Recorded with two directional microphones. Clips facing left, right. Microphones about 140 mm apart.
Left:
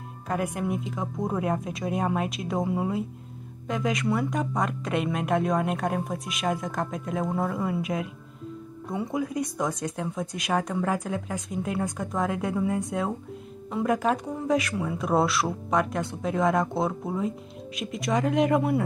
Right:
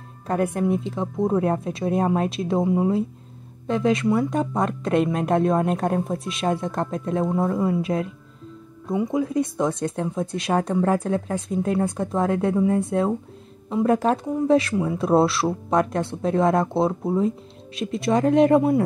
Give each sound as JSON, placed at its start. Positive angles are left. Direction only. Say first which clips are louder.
{"t": 0.3, "sound": "a woman's voice", "louder": "right 6 dB", "side_deg": -35}
{"t": 8.9, "sound": "a woman's voice", "louder": "right 6 dB", "side_deg": -20}